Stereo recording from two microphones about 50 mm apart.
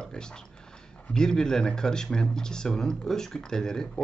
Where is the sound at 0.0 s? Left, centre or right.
Centre.